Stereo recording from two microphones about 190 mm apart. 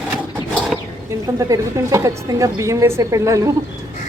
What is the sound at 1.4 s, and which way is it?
A woman's voice, 15° right (ahead or behind).